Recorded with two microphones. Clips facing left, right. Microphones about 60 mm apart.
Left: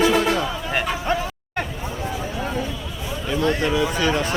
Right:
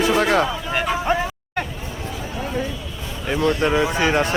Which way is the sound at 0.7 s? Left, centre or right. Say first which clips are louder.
Right 2 dB; centre.